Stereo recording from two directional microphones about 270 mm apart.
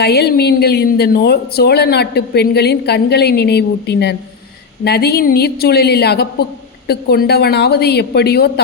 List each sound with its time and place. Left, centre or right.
0.0 s a woman's voice: left